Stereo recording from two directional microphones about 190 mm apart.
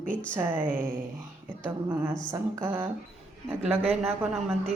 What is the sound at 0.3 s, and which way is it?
Speech, 10° right (ahead or behind).